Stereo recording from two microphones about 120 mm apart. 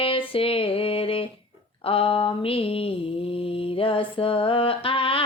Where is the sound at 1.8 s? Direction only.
50° left (ahead or behind).